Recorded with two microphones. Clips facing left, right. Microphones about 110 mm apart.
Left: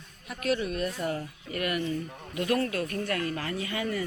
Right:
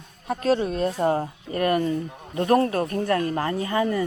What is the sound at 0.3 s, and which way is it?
Speech, 35° right (ahead or behind).